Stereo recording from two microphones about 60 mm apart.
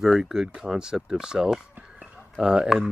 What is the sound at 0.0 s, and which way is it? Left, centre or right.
Speech, centre.